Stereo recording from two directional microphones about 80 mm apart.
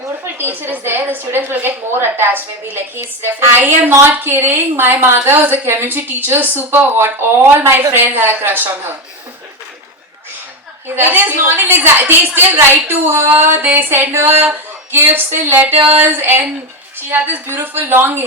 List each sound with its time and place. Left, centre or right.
0.0 s a woman's voice: right
10.8 s a woman's voice: right